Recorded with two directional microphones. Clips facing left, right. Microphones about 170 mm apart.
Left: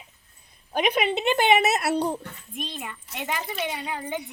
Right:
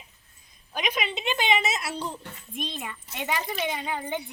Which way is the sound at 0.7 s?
55° left (ahead or behind).